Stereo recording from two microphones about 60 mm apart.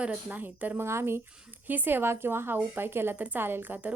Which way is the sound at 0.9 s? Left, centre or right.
Right.